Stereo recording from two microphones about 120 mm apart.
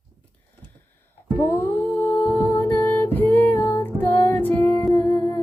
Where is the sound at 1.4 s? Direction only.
15° left (ahead or behind).